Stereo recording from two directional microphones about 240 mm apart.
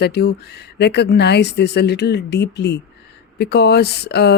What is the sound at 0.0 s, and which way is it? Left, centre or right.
Speech, left.